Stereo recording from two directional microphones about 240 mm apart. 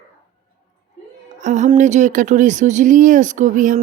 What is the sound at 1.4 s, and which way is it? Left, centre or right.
Speech, right.